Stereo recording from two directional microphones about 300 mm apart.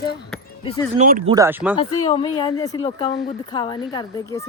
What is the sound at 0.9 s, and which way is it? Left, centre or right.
Speech, right.